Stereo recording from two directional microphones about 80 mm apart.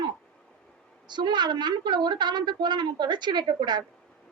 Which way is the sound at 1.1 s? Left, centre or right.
Right.